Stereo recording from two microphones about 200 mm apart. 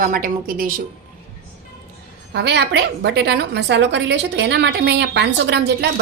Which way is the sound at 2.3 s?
55° right (ahead or behind).